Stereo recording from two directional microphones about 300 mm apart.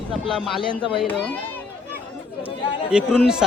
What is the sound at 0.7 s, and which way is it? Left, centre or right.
Speech, centre.